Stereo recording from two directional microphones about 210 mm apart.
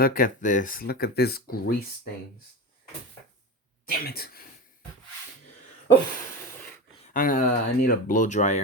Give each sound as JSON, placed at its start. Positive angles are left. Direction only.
{"t": 0.0, "sound": "speech", "side_deg": 40}
{"t": 3.8, "sound": "speech", "side_deg": 45}
{"t": 7.1, "sound": "speech", "side_deg": 40}